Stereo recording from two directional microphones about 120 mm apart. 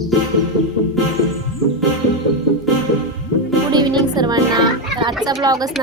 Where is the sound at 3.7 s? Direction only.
35° right (ahead or behind).